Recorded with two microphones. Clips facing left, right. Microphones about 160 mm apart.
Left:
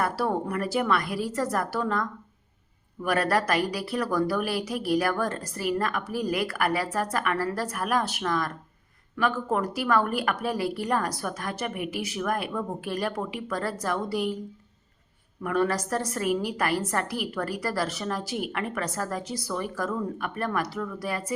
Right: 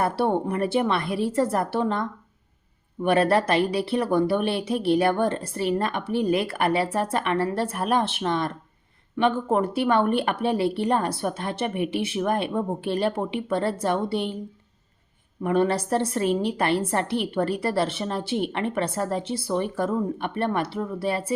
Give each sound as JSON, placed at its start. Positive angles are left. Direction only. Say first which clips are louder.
{"t": 0.0, "sound": "a woman's voice", "louder": "right 4 dB", "side_deg": -25}
{"t": 15.4, "sound": "a woman's voice", "louder": "right 4 dB", "side_deg": -30}